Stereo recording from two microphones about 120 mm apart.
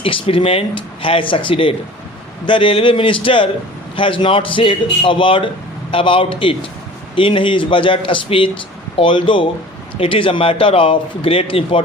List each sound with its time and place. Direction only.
0.0 s a man's voice: 50° left (ahead or behind)